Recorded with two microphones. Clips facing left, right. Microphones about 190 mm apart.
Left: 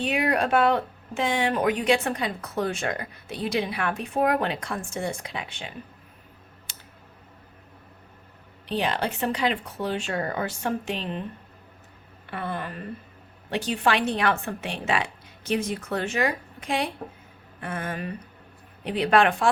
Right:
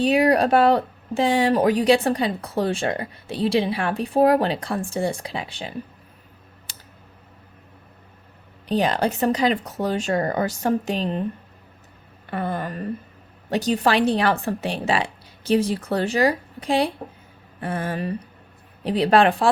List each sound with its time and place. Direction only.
0.0 s speech: 35° right (ahead or behind)
8.6 s speech: 40° right (ahead or behind)
12.3 s speech: 40° right (ahead or behind)